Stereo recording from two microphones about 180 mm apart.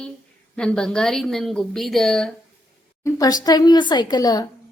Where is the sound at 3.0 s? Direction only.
20° left (ahead or behind).